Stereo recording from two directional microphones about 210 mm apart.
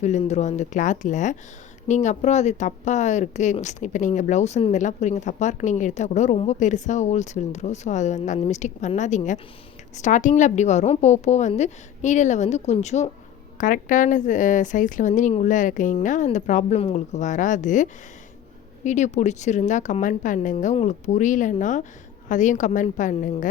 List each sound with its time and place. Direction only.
0.0 s a woman's voice: 35° left (ahead or behind)
18.9 s a woman's voice: 35° left (ahead or behind)